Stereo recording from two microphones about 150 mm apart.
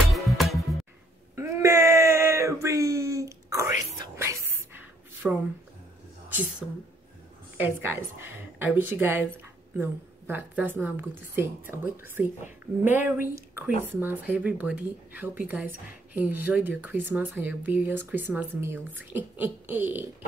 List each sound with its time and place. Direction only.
0.0 s music: centre (ahead or behind)
1.3 s a sound: 20° right (ahead or behind)
6.6 s speech: 5° left (ahead or behind)
7.5 s speech: 15° right (ahead or behind)